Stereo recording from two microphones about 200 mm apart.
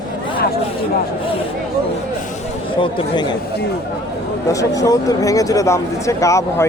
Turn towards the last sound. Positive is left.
turn(degrees=15)  # may be behind; listen again after turning